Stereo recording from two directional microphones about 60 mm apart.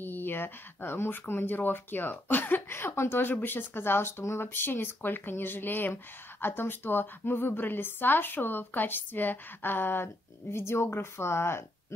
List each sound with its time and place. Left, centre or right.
0.0 s speech: left